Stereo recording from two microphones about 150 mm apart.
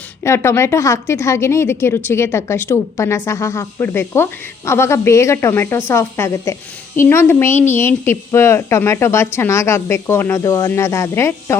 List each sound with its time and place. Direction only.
0.3 s a woman's voice: 20° left (ahead or behind)